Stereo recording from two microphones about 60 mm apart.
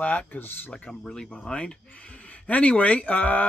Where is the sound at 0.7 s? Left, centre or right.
Centre.